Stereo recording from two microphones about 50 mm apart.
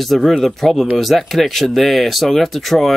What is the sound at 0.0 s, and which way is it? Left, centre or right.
Speech, centre.